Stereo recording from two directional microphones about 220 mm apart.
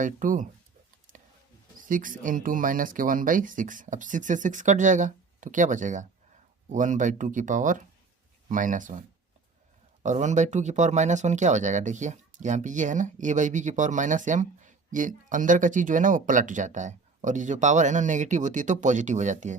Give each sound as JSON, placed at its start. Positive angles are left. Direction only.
{"t": 0.0, "sound": "speech", "side_deg": -35}
{"t": 1.8, "sound": "speech", "side_deg": -40}